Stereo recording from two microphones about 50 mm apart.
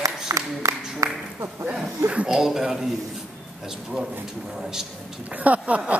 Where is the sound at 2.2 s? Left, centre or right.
Centre.